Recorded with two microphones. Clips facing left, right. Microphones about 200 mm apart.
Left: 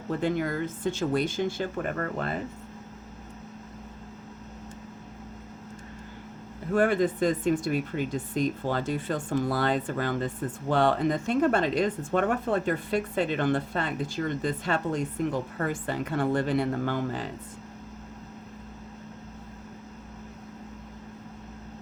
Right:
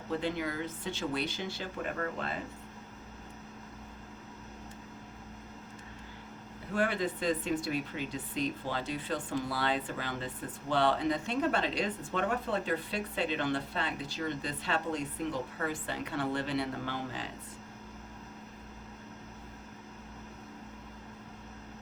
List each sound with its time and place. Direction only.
0.2 s speech: 50° left (ahead or behind)
6.7 s speech: 50° left (ahead or behind)